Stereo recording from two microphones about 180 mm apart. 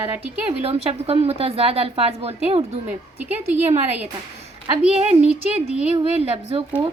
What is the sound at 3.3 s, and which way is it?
Speech, 10° right (ahead or behind).